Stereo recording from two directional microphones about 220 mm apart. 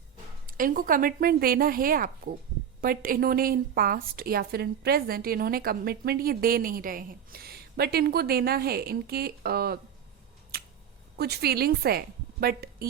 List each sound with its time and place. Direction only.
0.4 s a woman's voice: 40° right (ahead or behind)
10.5 s a sound: 45° right (ahead or behind)
11.2 s a woman's voice: 45° right (ahead or behind)